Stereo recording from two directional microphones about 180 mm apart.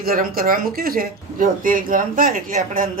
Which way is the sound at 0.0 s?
55° right (ahead or behind).